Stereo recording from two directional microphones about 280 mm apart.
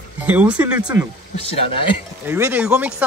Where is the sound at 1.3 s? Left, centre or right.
Centre.